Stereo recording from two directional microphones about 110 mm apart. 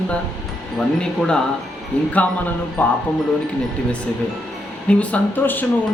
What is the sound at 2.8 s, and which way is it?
Speech, 20° left (ahead or behind).